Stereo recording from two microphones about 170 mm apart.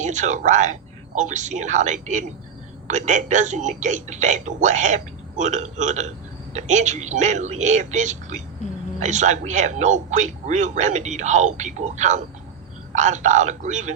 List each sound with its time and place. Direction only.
0.0 s a man's voice: 45° right (ahead or behind)